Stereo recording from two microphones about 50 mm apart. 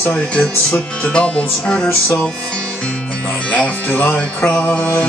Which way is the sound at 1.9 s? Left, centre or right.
Left.